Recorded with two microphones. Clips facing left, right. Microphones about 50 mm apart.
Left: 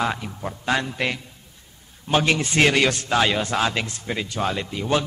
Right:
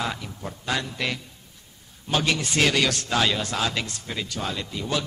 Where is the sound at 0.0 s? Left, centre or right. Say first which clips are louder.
Left 5 dB; left.